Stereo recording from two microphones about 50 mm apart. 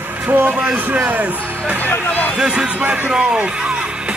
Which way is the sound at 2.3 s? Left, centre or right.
Centre.